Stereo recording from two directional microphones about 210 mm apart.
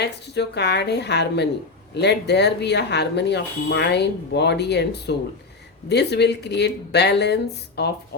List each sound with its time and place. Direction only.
0.0 s speech: 55° left (ahead or behind)